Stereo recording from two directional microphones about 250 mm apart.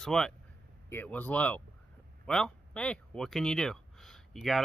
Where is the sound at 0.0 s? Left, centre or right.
Centre.